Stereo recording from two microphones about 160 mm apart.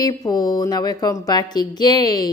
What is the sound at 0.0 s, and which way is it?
A woman's voice, 25° left (ahead or behind).